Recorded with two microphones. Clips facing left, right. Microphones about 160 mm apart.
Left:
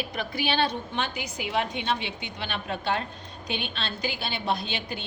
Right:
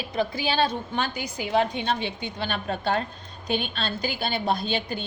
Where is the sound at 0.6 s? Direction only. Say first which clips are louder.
Right 2 dB; 45° right (ahead or behind).